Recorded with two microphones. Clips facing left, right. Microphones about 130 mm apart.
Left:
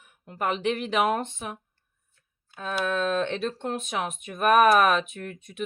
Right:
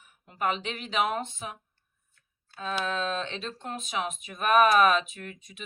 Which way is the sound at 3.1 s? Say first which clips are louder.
Left 7 dB; 55° left (ahead or behind).